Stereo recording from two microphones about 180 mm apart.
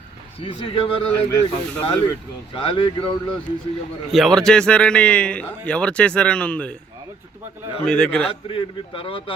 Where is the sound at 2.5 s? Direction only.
30° left (ahead or behind).